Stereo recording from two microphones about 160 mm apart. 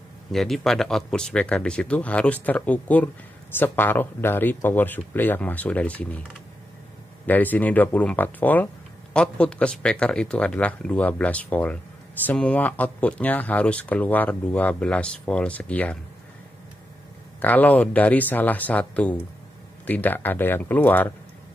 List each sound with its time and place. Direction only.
0.3 s speech: centre (ahead or behind)
7.2 s speech: 10° left (ahead or behind)
17.4 s speech: 10° left (ahead or behind)